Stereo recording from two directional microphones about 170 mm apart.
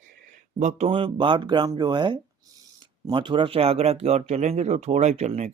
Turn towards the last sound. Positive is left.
turn(degrees=-40)  # may be behind; listen again after turning